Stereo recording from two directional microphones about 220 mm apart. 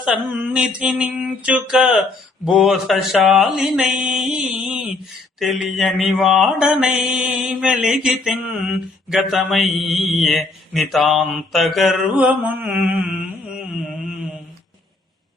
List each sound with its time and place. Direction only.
0.0 s mantra: 5° right (ahead or behind)